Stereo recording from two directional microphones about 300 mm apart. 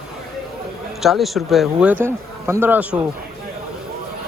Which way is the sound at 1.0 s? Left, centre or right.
Centre.